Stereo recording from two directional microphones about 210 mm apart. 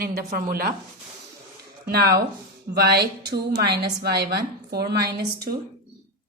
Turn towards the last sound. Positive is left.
turn(degrees=-50)  # may be behind; listen again after turning